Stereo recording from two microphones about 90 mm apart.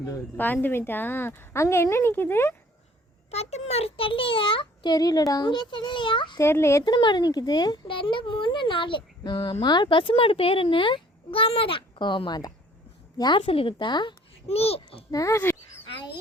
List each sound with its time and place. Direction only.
0.3 s a woman's voice: 20° left (ahead or behind)
3.8 s a child's voice: 90° left
4.9 s speech: 50° left (ahead or behind); by 6.4 s 65° left (ahead or behind)
6.4 s speech: 30° left (ahead or behind)
6.8 s a woman's voice: 55° left (ahead or behind)
13.4 s a child's voice: 90° left
15.1 s speech: 35° left (ahead or behind)